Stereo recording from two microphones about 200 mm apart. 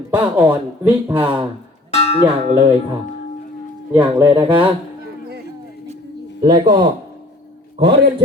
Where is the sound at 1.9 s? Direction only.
30° left (ahead or behind).